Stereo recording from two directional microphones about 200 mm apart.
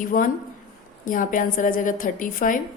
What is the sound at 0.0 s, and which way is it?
A woman's voice, 45° left (ahead or behind).